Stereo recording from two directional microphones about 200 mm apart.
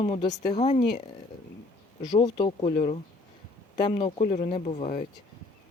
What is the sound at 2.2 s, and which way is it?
Speech, 25° left (ahead or behind).